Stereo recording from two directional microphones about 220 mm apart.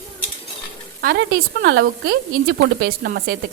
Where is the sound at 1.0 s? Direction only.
50° right (ahead or behind).